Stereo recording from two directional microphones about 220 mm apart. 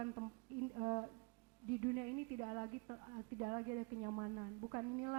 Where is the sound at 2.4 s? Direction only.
25° right (ahead or behind).